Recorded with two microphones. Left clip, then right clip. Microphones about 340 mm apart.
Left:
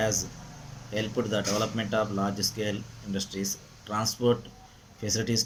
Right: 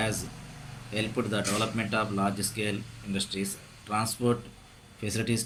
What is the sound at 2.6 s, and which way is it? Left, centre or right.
Speech, centre.